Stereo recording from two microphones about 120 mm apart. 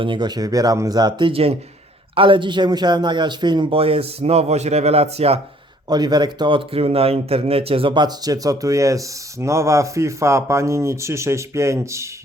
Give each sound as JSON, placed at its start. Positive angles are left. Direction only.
{"t": 0.0, "sound": "speech", "side_deg": -40}
{"t": 1.3, "sound": "a man's voice", "side_deg": -55}
{"t": 5.9, "sound": "speech", "side_deg": -35}